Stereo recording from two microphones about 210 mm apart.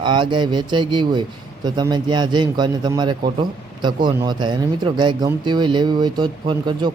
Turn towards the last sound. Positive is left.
turn(degrees=-20)  # may be behind; listen again after turning